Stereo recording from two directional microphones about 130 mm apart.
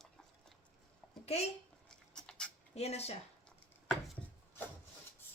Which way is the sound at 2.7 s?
55° left (ahead or behind).